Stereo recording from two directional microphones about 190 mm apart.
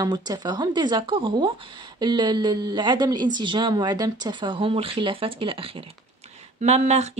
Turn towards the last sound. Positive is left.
turn(degrees=-35)  # may be behind; listen again after turning